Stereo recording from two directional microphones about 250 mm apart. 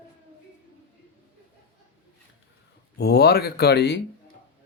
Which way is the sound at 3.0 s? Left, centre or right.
Left.